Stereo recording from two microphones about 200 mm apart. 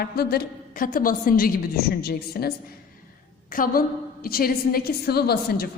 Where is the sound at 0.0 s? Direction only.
50° left (ahead or behind).